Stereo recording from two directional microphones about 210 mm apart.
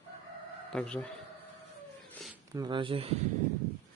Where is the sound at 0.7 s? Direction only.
5° left (ahead or behind).